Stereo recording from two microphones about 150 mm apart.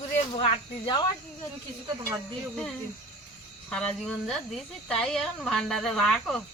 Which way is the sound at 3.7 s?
5° left (ahead or behind).